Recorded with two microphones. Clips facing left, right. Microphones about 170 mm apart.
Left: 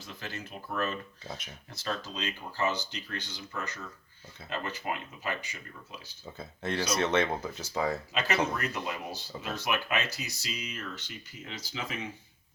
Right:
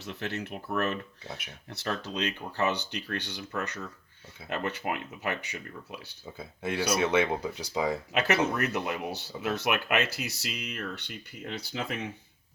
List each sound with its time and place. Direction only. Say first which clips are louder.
0.0 s speech: right 6 dB; 65° right (ahead or behind)
6.2 s speech: right 1 dB; 10° right (ahead or behind)
8.5 s speech: right 4 dB; 60° right (ahead or behind)